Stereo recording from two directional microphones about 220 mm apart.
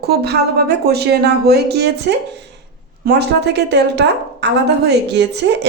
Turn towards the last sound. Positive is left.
turn(degrees=-50)  # may be behind; listen again after turning